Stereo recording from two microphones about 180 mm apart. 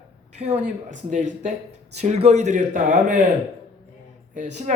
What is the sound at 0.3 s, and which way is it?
Speech, 40° right (ahead or behind).